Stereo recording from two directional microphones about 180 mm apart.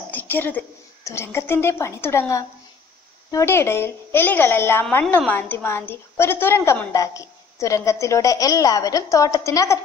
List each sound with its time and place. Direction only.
0.1 s a woman's voice: 10° left (ahead or behind)